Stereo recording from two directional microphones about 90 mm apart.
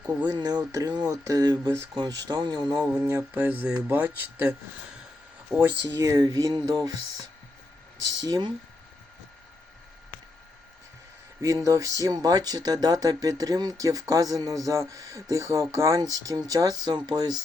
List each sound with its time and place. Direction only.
0.0 s speech: 15° right (ahead or behind)
0.3 s speech: 50° right (ahead or behind)
3.0 s speech: 30° right (ahead or behind)
3.3 s speech: 20° right (ahead or behind)
6.0 s speech: 40° right (ahead or behind)
11.4 s speech: 35° right (ahead or behind)